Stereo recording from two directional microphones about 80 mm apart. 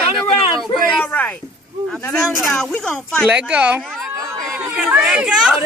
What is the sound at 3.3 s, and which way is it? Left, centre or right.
A woman's voice, centre.